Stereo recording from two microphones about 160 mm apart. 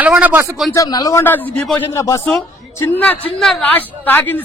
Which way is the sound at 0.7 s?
20° left (ahead or behind).